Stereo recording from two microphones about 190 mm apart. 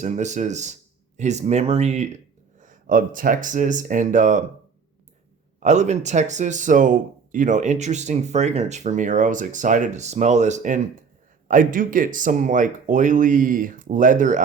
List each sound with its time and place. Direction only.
0.0 s speech: 40° right (ahead or behind)
5.5 s speech: 40° right (ahead or behind)